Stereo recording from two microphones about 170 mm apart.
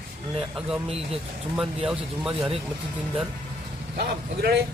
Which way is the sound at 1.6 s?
5° right (ahead or behind).